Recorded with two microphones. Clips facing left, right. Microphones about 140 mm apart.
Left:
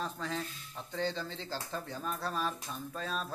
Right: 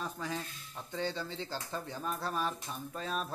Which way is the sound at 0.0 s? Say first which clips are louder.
Left 1 dB; 15° right (ahead or behind).